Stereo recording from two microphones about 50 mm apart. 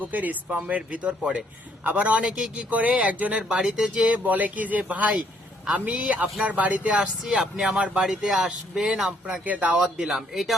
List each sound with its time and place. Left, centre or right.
0.0 s speech: right
2.2 s speech: centre
2.6 s speech: right
3.3 s speech: centre
4.0 s speech: right
7.2 s speech: centre
9.4 s speech: right
9.7 s speech: centre